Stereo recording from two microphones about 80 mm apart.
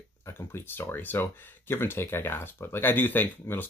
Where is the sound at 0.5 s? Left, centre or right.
Left.